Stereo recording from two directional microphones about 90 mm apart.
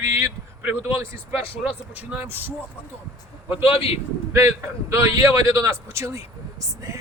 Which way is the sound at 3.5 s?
90° left.